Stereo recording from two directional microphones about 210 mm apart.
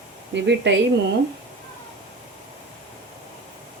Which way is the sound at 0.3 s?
55° right (ahead or behind).